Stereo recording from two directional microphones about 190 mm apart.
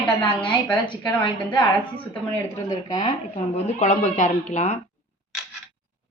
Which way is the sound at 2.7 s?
20° left (ahead or behind).